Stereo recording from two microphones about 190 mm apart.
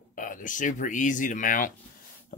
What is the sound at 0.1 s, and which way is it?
Speech, 45° left (ahead or behind).